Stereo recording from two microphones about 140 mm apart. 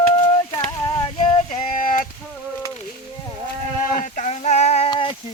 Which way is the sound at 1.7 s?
75° left (ahead or behind).